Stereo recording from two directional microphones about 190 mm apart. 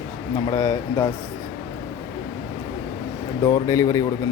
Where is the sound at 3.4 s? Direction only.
20° left (ahead or behind).